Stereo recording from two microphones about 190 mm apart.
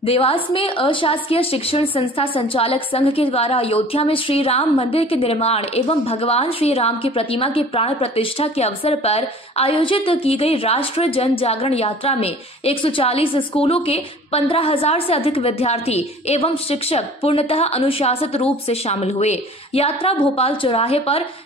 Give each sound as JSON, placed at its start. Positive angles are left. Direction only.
{"t": 0.0, "sound": "a woman's voice", "side_deg": 30}